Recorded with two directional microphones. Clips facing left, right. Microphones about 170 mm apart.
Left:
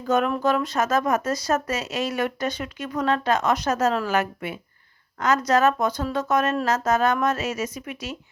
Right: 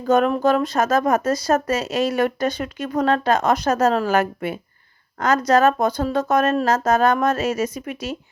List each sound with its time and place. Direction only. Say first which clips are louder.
0.1 s speech: right 4 dB; 30° right (ahead or behind)